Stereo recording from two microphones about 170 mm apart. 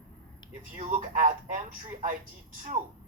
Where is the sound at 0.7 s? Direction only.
50° right (ahead or behind).